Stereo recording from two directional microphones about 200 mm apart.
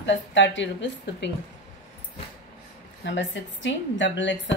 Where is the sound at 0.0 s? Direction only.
65° left (ahead or behind).